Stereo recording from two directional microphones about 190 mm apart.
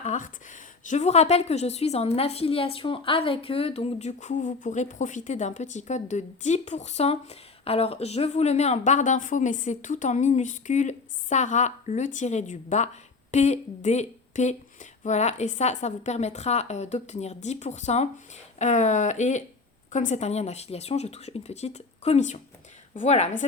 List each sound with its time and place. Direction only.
0.0 s a woman's voice: 40° left (ahead or behind)